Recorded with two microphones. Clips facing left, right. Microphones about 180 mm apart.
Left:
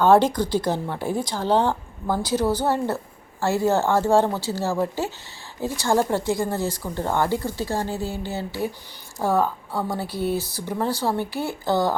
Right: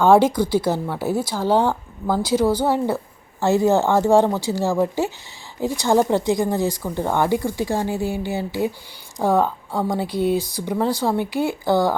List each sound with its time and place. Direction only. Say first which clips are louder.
0.0 s speech: right 2 dB; 10° right (ahead or behind)